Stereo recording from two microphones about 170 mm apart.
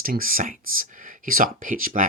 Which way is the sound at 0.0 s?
55° right (ahead or behind).